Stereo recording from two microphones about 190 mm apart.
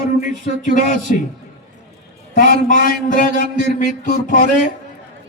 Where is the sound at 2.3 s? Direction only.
45° left (ahead or behind).